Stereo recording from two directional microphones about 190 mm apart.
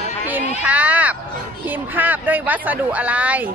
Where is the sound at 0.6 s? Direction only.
5° right (ahead or behind).